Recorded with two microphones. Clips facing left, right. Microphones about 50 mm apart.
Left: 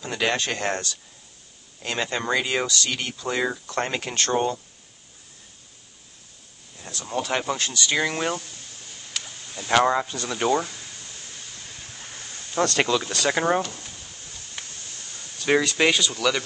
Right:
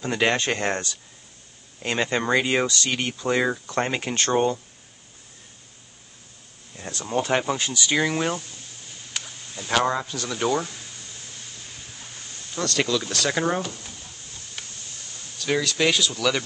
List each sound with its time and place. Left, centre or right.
0.0 s speech: right
4.1 s speech: right
6.7 s speech: right
7.2 s speech: right
7.5 s speech: centre
9.8 s speech: centre
12.5 s speech: left
13.6 s speech: centre
15.3 s speech: left
15.9 s speech: centre